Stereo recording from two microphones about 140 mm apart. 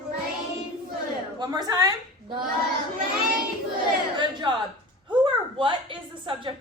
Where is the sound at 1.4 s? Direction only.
30° right (ahead or behind).